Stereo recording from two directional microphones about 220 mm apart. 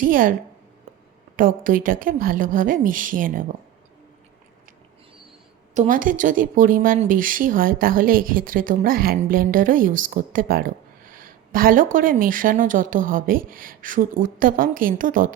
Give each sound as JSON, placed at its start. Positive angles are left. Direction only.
{"t": 0.0, "sound": "speech", "side_deg": -40}
{"t": 1.4, "sound": "speech", "side_deg": -40}
{"t": 5.7, "sound": "speech", "side_deg": -35}